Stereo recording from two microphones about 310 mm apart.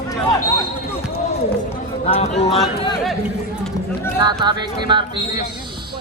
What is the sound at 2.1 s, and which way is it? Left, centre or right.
Speech, centre.